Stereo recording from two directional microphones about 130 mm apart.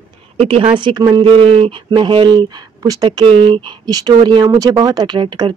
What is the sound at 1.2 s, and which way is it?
Speech, 45° right (ahead or behind).